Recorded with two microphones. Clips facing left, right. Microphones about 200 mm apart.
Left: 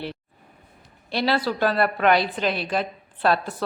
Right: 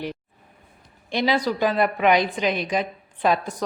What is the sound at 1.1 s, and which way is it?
A woman's voice, 15° right (ahead or behind).